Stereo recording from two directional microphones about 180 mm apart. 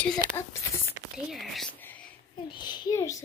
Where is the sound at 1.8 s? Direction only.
10° left (ahead or behind).